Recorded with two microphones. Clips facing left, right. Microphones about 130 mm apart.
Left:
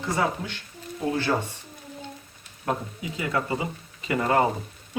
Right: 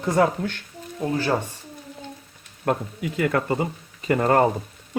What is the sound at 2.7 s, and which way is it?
Speech, 60° right (ahead or behind).